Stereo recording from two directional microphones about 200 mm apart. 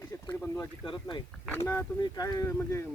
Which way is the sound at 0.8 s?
25° left (ahead or behind).